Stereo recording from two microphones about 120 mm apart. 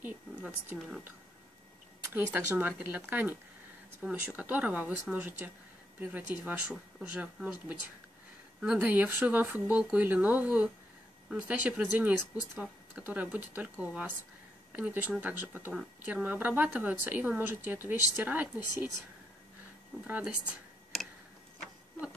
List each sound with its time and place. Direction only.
0.0 s a sound: 15° right (ahead or behind)
2.1 s a woman's voice: 20° right (ahead or behind)
8.7 s a woman's voice: 15° right (ahead or behind)
20.1 s a woman's voice: 10° right (ahead or behind)